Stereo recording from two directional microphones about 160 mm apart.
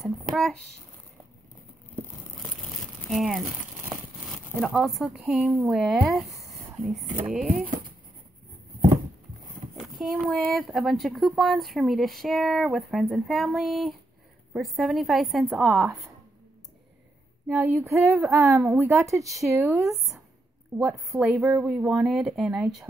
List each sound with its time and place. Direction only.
0.0 s speech: centre (ahead or behind)
3.1 s speech: centre (ahead or behind)
7.2 s speech: 5° right (ahead or behind)
9.8 s speech: 5° right (ahead or behind)
17.6 s a woman's voice: 15° right (ahead or behind)